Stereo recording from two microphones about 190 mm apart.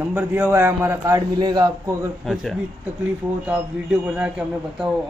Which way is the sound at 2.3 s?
Centre (ahead or behind).